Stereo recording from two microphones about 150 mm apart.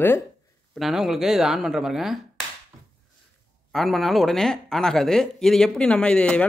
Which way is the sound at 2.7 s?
25° right (ahead or behind).